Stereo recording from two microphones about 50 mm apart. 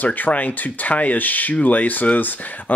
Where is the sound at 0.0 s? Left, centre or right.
Left.